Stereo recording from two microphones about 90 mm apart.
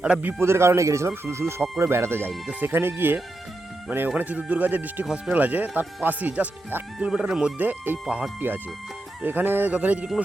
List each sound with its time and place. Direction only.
0.0 s speech: 15° right (ahead or behind)
5.0 s speech: 5° right (ahead or behind)
5.3 s speech: 20° right (ahead or behind)
7.6 s speech: 20° right (ahead or behind)
8.0 s speech: 5° right (ahead or behind)
8.4 s speech: 25° right (ahead or behind)